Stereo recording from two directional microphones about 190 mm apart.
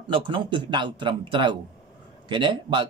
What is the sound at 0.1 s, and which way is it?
Speech, 25° right (ahead or behind).